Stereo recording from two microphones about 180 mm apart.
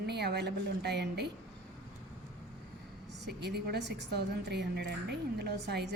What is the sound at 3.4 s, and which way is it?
A woman's voice, 65° right (ahead or behind).